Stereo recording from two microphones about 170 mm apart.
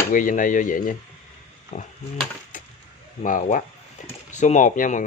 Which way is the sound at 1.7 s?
40° left (ahead or behind).